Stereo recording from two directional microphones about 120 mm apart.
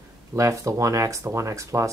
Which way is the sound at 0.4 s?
25° right (ahead or behind).